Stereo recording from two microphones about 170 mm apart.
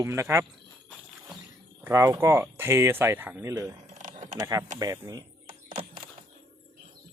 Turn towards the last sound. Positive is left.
turn(degrees=-30)  # may be behind; listen again after turning